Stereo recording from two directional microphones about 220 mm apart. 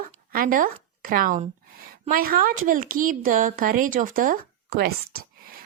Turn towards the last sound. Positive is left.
turn(degrees=-40)  # may be behind; listen again after turning